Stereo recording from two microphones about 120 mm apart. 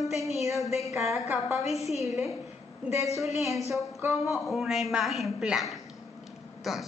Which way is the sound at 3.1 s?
25° right (ahead or behind).